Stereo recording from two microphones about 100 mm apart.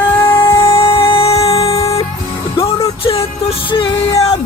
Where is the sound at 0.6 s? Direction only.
65° left (ahead or behind).